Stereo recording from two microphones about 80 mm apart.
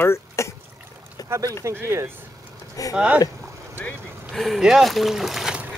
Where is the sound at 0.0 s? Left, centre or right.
Left.